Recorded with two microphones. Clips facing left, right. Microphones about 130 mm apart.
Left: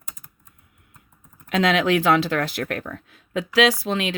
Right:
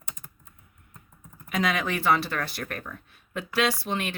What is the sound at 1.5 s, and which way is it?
Speech, 80° left.